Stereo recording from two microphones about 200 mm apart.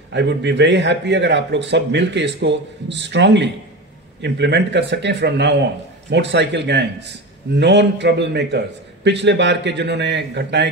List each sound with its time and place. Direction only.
0.1 s a man's voice: 60° right (ahead or behind)